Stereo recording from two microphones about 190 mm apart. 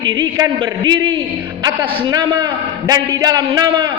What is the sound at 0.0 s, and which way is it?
A man's voice, 25° right (ahead or behind).